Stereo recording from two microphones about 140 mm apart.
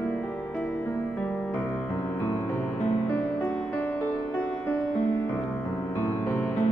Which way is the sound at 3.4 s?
15° left (ahead or behind).